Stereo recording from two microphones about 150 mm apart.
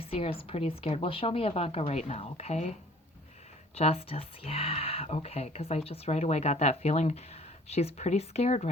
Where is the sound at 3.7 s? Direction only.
40° left (ahead or behind).